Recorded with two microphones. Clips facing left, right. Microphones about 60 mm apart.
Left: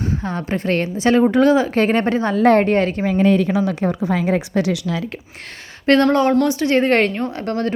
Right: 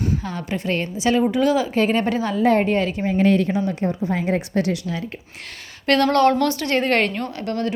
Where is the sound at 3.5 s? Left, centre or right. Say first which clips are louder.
Left 3 dB; left.